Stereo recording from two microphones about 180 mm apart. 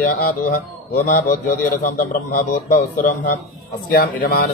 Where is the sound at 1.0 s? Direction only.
50° left (ahead or behind).